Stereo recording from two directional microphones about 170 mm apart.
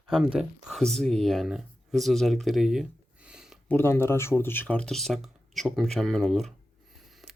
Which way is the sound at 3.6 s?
10° left (ahead or behind).